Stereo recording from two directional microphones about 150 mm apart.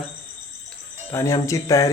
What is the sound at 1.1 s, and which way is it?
Speech, 20° left (ahead or behind).